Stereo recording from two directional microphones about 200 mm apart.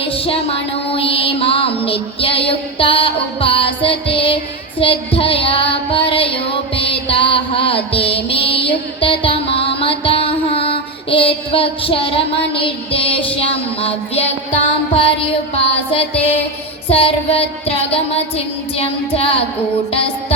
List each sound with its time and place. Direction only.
0.0 s music: 30° left (ahead or behind)
4.8 s child singing: 25° left (ahead or behind)
9.0 s music: 25° left (ahead or behind)
15.5 s child singing: 30° left (ahead or behind)